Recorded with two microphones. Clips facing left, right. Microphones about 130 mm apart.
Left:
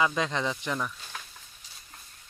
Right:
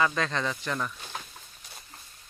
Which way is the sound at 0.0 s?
15° left (ahead or behind).